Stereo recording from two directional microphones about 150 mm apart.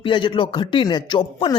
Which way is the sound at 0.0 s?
35° left (ahead or behind).